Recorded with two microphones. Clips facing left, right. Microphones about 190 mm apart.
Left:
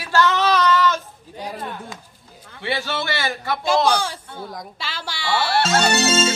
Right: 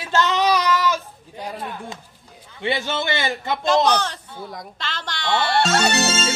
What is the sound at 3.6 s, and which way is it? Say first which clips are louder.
Speech: even; 10° left (ahead or behind).